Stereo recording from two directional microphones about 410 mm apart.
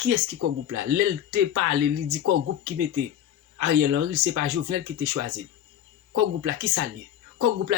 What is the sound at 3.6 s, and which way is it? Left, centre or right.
Speech, right.